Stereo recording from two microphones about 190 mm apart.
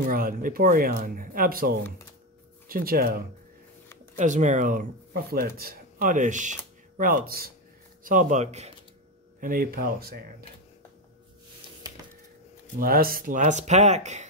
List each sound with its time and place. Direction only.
0.0 s speech: 50° right (ahead or behind)
4.2 s speech: 40° right (ahead or behind)
9.4 s speech: 50° right (ahead or behind)
12.7 s speech: 50° right (ahead or behind)